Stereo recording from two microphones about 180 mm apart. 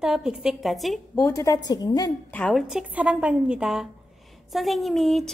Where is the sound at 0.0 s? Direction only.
5° right (ahead or behind).